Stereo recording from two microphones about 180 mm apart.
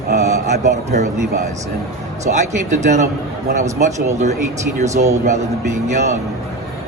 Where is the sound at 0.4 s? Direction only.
40° right (ahead or behind).